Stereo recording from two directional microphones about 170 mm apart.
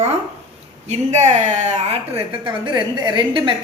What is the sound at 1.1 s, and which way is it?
Speech, 45° right (ahead or behind).